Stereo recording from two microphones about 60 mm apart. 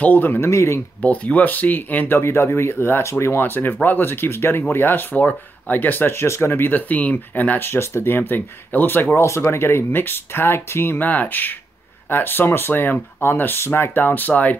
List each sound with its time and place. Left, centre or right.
0.0 s speech: left
0.4 s speech: left
1.0 s speech: left
2.1 s speech: left
11.0 s speech: left